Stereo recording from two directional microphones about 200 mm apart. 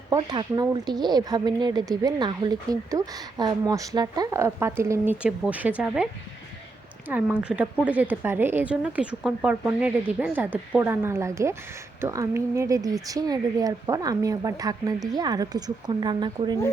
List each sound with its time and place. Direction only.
0.1 s a woman's voice: 20° right (ahead or behind)
7.1 s a woman's voice: 5° right (ahead or behind); by 16.6 s 20° right (ahead or behind)